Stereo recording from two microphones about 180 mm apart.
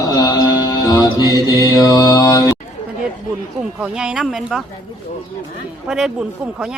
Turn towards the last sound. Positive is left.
turn(degrees=-5)  # may be behind; listen again after turning